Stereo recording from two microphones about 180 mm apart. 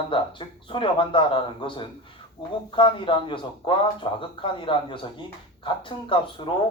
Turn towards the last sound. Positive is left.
turn(degrees=30)  # may be behind; listen again after turning